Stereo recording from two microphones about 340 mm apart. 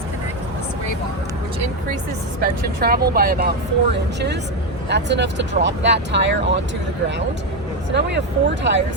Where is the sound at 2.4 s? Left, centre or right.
Right.